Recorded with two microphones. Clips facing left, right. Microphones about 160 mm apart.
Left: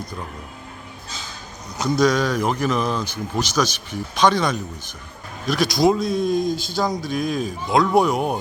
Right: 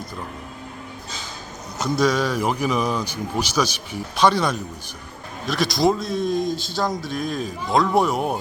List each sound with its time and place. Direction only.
1.8 s a man's voice: 5° right (ahead or behind)